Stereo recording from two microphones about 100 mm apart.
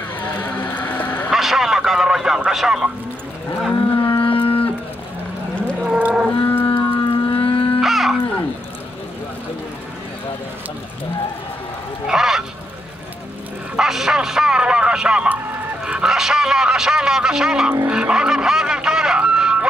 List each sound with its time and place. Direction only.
0.2 s a sound: 15° left (ahead or behind)
1.3 s radio: centre (ahead or behind)
3.7 s livestock: 55° left (ahead or behind)
5.9 s livestock: 10° right (ahead or behind)
6.4 s livestock: 20° left (ahead or behind)
7.0 s a sound: 55° left (ahead or behind)
7.8 s music: centre (ahead or behind)
12.1 s speech: 5° right (ahead or behind)
13.7 s a sound: 5° right (ahead or behind)
15.8 s speech: 5° right (ahead or behind)
17.8 s vehicle: 10° right (ahead or behind)